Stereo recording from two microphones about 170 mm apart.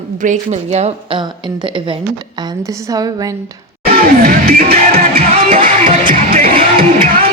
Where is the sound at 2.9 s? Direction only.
20° right (ahead or behind).